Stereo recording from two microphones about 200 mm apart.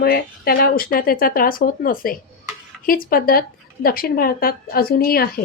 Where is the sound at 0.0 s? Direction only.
50° left (ahead or behind).